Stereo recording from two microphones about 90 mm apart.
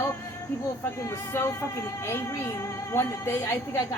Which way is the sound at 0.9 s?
30° left (ahead or behind).